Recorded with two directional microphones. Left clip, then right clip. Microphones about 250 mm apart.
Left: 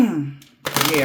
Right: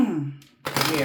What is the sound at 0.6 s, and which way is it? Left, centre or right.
Typewriter, left.